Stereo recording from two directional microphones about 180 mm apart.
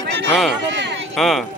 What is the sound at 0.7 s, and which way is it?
Run, 80° right.